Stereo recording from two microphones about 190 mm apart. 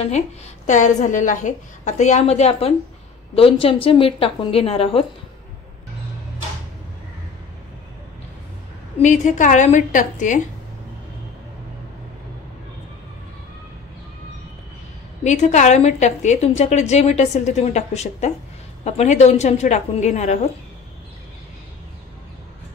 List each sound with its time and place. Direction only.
0.7 s a woman's voice: 40° left (ahead or behind)
9.0 s a woman's voice: 40° left (ahead or behind)
15.2 s a woman's voice: 40° left (ahead or behind)